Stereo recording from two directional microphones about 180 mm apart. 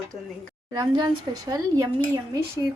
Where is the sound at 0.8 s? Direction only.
25° right (ahead or behind).